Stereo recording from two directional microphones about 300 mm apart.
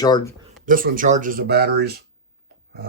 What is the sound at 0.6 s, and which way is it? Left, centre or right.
Speech, right.